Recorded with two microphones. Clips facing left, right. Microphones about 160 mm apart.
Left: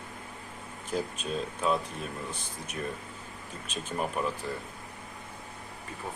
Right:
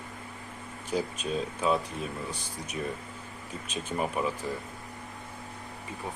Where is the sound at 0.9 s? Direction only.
5° right (ahead or behind).